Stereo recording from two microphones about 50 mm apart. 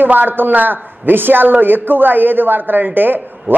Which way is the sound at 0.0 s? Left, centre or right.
Right.